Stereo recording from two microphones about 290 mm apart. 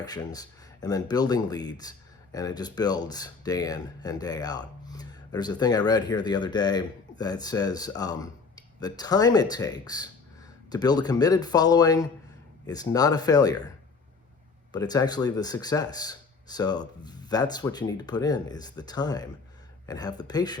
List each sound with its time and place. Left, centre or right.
0.0 s speech: centre
14.7 s speech: centre